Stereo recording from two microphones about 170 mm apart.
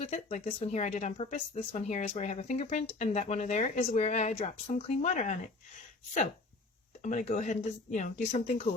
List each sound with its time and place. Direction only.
0.0 s speech: 40° left (ahead or behind)
7.0 s speech: 45° left (ahead or behind)